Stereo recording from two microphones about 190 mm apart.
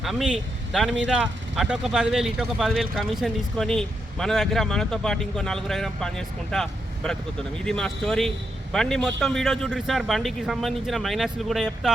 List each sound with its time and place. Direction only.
0.0 s speech: centre (ahead or behind)